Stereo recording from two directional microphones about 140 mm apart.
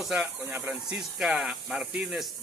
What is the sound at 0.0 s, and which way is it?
Speech, 5° right (ahead or behind).